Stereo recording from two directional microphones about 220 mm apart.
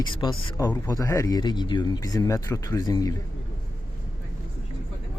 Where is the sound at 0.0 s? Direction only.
20° left (ahead or behind).